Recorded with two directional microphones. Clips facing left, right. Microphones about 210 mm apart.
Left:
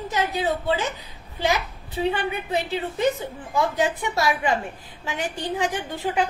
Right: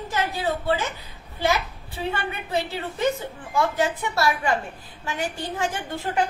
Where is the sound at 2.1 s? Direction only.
15° left (ahead or behind).